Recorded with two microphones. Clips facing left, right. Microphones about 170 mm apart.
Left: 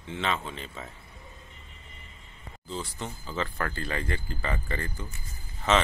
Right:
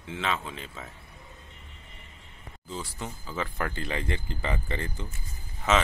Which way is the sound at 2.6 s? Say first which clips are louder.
Left 1 dB; 5° right (ahead or behind).